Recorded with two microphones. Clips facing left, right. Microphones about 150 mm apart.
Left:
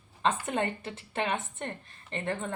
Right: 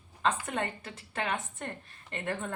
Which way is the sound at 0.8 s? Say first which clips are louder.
Left 3 dB; 30° left (ahead or behind).